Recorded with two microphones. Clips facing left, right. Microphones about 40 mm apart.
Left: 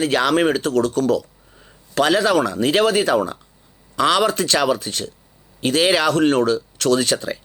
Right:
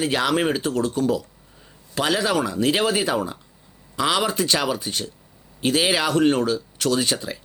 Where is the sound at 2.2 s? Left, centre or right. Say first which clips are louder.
Left 4 dB; left.